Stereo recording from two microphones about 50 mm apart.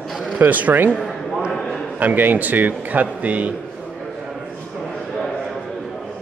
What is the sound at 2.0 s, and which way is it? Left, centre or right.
Speech, right.